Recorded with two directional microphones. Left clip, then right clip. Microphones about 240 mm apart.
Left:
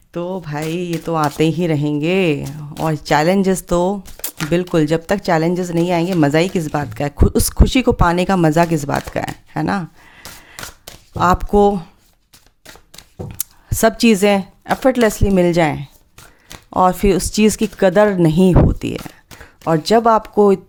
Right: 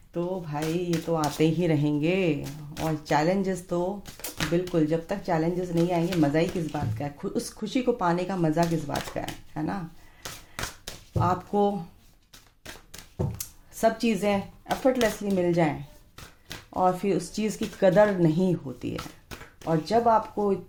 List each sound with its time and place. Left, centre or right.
0.1 s speech: left
10.2 s a sound: centre
11.2 s speech: left
13.4 s speech: left